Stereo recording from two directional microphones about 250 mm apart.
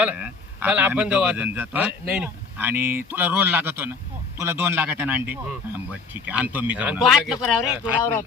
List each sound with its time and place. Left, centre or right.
0.0 s a man's voice: centre